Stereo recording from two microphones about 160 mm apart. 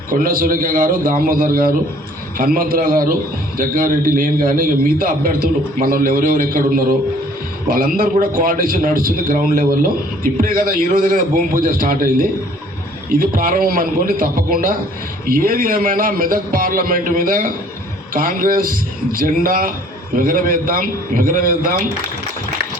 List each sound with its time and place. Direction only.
0.1 s a man's voice: 65° right (ahead or behind)